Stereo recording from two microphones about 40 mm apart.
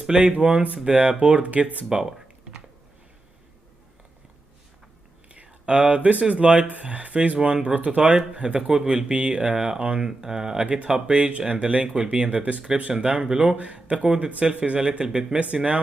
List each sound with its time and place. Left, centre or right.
0.1 s speech: right
1.9 s speech: centre
5.3 s speech: right
8.5 s speech: centre
10.9 s speech: right
13.6 s speech: right
14.5 s speech: right
15.0 s speech: centre
15.3 s speech: right